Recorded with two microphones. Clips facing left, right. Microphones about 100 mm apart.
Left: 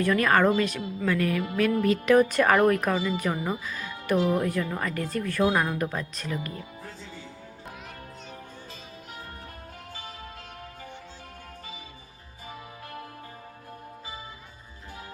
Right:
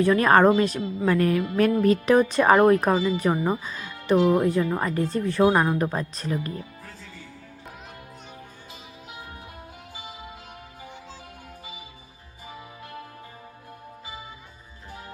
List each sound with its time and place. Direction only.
0.0 s a woman's voice: 30° right (ahead or behind)
2.3 s speech: 25° right (ahead or behind)